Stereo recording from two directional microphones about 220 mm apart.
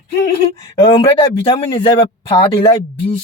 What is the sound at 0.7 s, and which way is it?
Speech, 25° left (ahead or behind).